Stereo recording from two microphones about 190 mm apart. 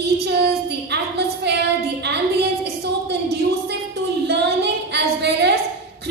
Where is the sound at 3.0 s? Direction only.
60° right (ahead or behind).